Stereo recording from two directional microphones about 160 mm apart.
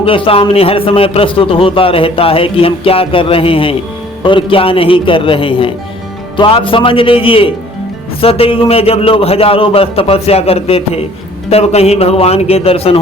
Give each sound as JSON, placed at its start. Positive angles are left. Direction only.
{"t": 0.0, "sound": "a man's voice", "side_deg": 35}